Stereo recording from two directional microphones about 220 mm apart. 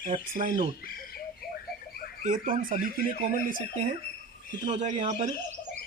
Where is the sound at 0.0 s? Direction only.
35° right (ahead or behind).